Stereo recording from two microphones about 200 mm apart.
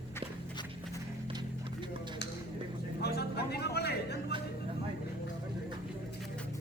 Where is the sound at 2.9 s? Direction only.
55° left (ahead or behind).